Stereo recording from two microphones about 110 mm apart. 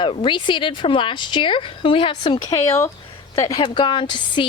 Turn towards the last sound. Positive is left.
turn(degrees=45)  # may be behind; listen again after turning